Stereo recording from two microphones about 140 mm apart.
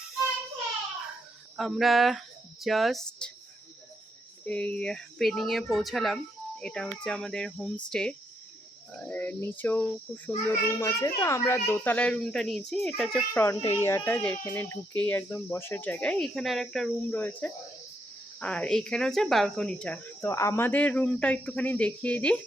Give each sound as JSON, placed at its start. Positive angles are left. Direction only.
{"t": 1.5, "sound": "speech", "side_deg": 0}
{"t": 4.4, "sound": "a child's voice", "side_deg": 10}
{"t": 13.3, "sound": "a child's voice", "side_deg": 20}
{"t": 17.1, "sound": "a child's voice", "side_deg": 10}
{"t": 20.2, "sound": "a child's voice", "side_deg": 20}